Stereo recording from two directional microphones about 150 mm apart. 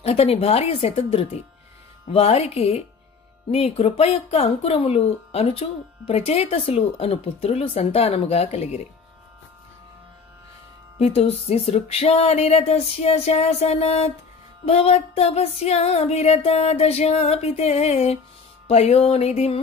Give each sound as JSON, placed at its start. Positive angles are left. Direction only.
{"t": 0.0, "sound": "speech", "side_deg": 40}
{"t": 11.0, "sound": "music", "side_deg": 45}